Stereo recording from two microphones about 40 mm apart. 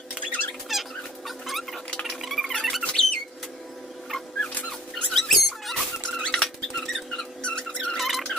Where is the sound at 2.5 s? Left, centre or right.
Centre.